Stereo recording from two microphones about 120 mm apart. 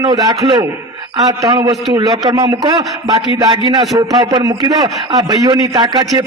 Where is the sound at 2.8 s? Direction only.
Centre (ahead or behind).